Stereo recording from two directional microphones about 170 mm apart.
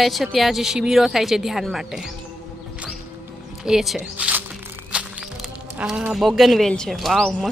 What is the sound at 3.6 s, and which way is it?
Music, centre (ahead or behind).